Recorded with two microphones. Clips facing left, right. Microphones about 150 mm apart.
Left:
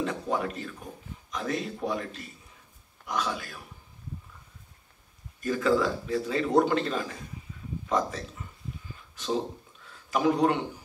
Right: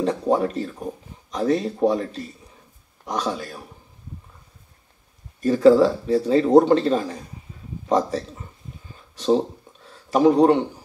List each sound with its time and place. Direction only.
0.0 s speech: 35° right (ahead or behind)
5.4 s speech: 30° right (ahead or behind)
8.9 s a sound: 35° right (ahead or behind)